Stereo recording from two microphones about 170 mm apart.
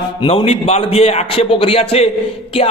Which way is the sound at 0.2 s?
35° left (ahead or behind).